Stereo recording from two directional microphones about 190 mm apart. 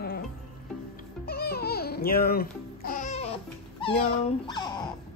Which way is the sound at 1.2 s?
55° left (ahead or behind).